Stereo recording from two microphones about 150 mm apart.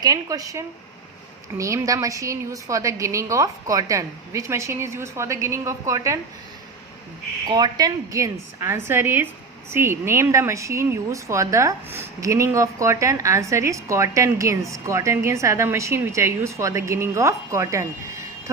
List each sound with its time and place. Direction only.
0.0 s speech: 25° right (ahead or behind)
7.4 s speech: 25° right (ahead or behind)